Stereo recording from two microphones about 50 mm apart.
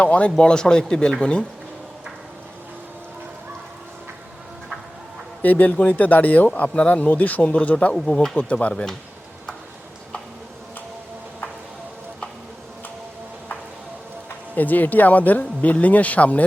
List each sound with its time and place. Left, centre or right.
0.0 s speech: left
5.4 s speech: left; by 9.0 s centre
14.5 s speech: left